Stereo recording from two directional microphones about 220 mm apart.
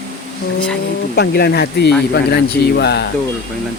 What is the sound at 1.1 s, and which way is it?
Speech, 45° left (ahead or behind).